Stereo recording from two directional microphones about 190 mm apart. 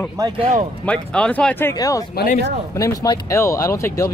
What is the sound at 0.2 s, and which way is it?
Speech, 15° right (ahead or behind).